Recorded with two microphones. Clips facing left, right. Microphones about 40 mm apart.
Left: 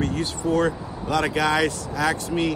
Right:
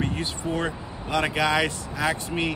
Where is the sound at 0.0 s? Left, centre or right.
Right.